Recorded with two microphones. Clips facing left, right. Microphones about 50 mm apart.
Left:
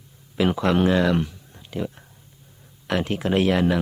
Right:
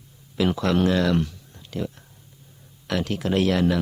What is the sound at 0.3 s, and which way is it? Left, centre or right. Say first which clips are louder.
Speech: left 1 dB; left.